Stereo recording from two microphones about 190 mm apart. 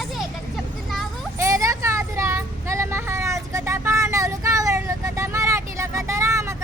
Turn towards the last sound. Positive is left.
turn(degrees=-15)  # may be behind; listen again after turning